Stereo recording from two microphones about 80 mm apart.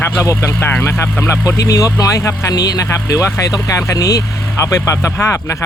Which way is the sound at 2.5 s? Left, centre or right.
Left.